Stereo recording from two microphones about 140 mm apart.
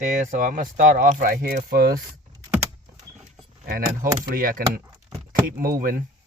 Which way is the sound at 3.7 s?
90° right.